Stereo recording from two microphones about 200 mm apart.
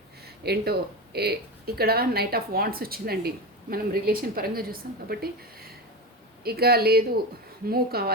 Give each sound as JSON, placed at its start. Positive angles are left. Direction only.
{"t": 0.4, "sound": "speech", "side_deg": -50}